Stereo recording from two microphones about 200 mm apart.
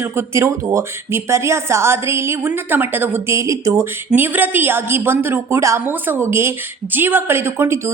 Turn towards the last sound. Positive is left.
turn(degrees=-10)  # may be behind; listen again after turning